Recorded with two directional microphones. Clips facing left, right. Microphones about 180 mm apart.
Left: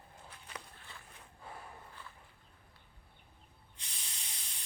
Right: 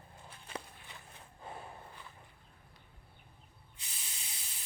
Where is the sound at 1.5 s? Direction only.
25° right (ahead or behind).